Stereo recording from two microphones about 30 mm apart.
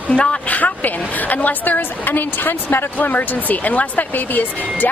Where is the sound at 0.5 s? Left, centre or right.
Left.